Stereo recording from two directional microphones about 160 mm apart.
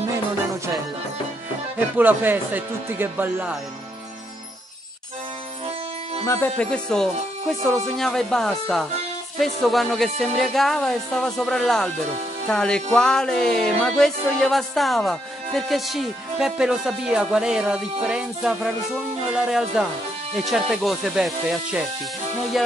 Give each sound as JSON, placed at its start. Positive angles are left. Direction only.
{"t": 1.8, "sound": "speech", "side_deg": -10}
{"t": 6.2, "sound": "speech", "side_deg": 20}
{"t": 6.6, "sound": "music", "side_deg": 5}